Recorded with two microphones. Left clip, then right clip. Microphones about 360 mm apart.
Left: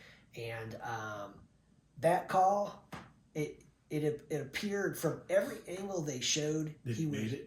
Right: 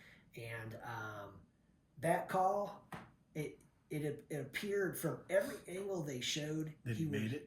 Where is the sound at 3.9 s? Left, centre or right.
Centre.